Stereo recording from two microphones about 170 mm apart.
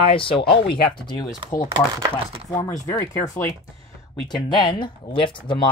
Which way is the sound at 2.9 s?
15° left (ahead or behind).